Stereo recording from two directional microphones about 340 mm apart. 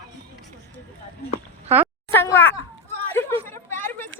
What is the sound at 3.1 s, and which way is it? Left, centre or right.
Chatter, centre.